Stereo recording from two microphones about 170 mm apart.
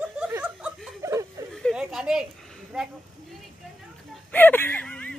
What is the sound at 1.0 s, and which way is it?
Chuckle, 20° right (ahead or behind).